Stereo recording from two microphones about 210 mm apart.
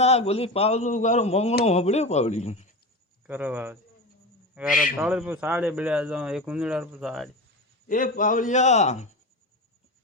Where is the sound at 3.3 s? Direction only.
10° right (ahead or behind).